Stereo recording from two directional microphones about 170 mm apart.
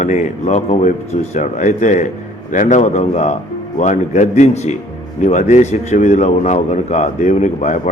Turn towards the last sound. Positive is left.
turn(degrees=45)  # may be behind; listen again after turning